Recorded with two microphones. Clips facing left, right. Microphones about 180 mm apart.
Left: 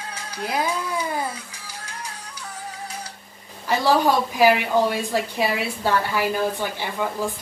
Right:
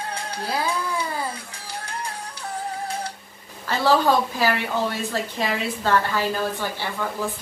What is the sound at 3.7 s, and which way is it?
A woman's voice, 15° left (ahead or behind).